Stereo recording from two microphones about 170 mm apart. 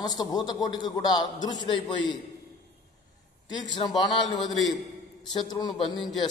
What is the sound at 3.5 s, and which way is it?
A man's voice, 25° left (ahead or behind).